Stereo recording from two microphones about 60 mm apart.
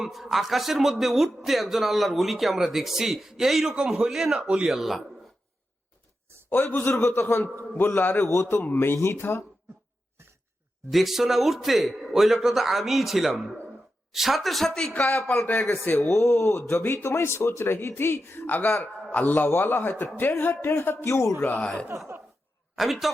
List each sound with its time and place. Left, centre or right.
0.0 s a man's voice: centre
3.8 s a man's voice: centre
4.7 s a man's voice: centre
6.5 s speech: left
9.0 s speech: left
10.9 s a man's voice: centre
14.9 s a man's voice: left
16.1 s speech: left
17.6 s a man's voice: left
21.1 s a man's voice: left
22.7 s a man's voice: centre